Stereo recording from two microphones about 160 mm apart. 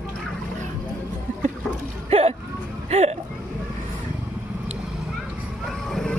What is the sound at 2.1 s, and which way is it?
Speech, 40° right (ahead or behind).